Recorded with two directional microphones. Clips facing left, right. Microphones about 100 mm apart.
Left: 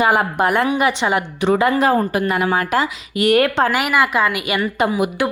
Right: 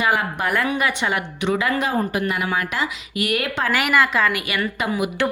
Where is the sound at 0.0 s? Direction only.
35° left (ahead or behind).